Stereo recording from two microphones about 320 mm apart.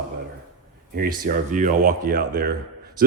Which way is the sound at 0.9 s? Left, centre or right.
Right.